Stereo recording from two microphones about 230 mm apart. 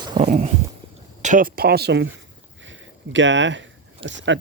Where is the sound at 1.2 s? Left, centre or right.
Right.